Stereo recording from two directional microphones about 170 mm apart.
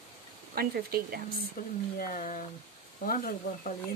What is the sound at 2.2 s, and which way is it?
Speech, 45° left (ahead or behind).